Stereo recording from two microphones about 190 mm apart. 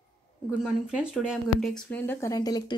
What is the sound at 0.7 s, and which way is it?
A woman's voice, 5° right (ahead or behind).